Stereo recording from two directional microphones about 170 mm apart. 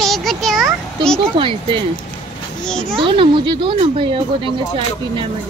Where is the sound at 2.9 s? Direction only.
30° right (ahead or behind).